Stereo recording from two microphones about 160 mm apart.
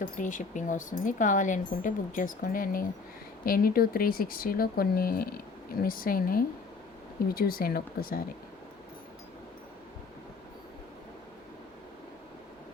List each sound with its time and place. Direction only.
0.0 s speech: 55° left (ahead or behind)